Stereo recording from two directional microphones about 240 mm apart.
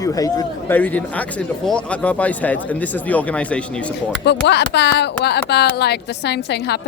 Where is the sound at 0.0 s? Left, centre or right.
Centre.